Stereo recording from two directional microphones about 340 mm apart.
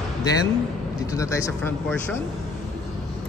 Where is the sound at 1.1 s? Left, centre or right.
Centre.